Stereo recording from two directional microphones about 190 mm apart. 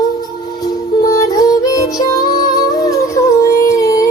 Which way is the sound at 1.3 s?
20° left (ahead or behind).